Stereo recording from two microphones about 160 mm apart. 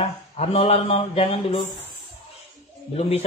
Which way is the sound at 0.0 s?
35° left (ahead or behind).